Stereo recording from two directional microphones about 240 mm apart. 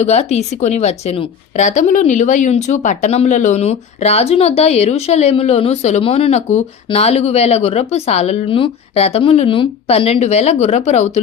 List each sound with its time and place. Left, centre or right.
0.0 s a woman's voice: left